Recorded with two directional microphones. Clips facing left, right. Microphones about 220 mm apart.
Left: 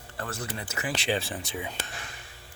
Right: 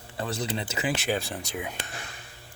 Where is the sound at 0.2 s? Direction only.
15° right (ahead or behind).